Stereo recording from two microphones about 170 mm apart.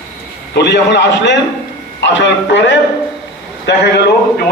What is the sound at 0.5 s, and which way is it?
A man's voice, 90° left.